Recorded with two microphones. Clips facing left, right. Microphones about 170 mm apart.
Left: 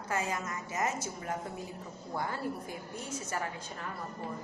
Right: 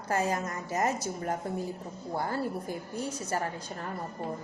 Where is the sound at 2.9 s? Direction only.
35° right (ahead or behind).